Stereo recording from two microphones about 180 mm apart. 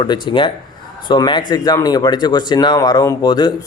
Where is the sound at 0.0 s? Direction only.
25° left (ahead or behind).